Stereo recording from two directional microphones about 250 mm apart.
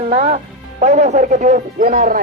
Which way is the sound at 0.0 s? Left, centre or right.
Right.